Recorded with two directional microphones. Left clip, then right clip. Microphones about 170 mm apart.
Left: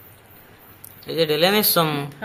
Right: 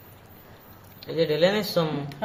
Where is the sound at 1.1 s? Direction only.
25° left (ahead or behind).